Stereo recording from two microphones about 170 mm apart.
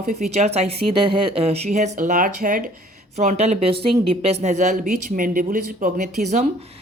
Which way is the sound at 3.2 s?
40° right (ahead or behind).